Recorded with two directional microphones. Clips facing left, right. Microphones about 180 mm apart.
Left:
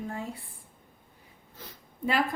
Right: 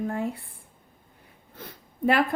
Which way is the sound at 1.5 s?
60° right (ahead or behind).